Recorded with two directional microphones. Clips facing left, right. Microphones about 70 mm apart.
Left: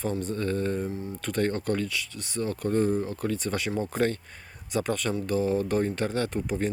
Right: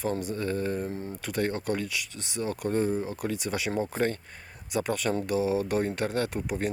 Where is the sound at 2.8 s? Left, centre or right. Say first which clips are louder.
Left 2 dB; centre.